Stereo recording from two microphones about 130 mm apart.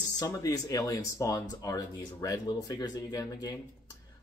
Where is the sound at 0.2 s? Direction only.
30° left (ahead or behind).